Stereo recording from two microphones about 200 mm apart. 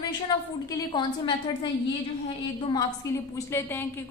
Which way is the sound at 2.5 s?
25° left (ahead or behind).